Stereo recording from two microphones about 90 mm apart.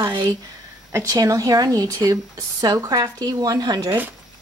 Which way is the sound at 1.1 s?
40° right (ahead or behind).